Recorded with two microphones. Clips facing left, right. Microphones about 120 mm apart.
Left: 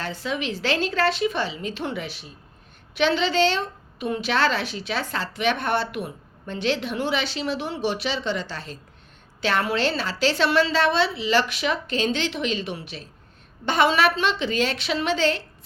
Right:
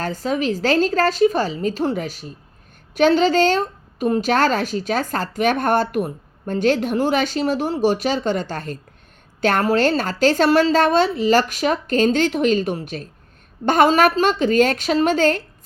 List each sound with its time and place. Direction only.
0.0 s a woman's voice: 40° right (ahead or behind)